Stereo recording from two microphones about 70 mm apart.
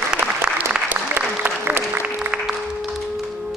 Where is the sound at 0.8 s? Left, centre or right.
Right.